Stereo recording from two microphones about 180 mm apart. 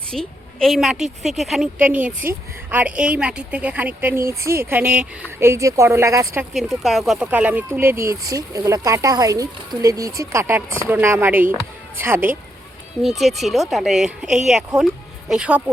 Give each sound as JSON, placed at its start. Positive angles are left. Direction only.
{"t": 0.1, "sound": "a woman's voice", "side_deg": 5}
{"t": 6.5, "sound": "a woman's voice", "side_deg": 0}
{"t": 13.0, "sound": "a woman's voice", "side_deg": 0}